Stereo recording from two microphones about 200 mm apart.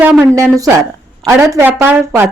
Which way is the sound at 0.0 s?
10° right (ahead or behind).